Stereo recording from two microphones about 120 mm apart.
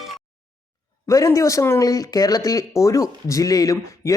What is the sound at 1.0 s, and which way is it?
Speech, 25° left (ahead or behind).